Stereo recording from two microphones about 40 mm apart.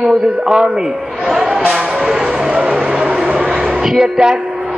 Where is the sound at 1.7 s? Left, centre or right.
Centre.